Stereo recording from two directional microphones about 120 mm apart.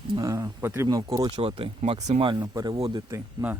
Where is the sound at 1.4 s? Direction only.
50° right (ahead or behind).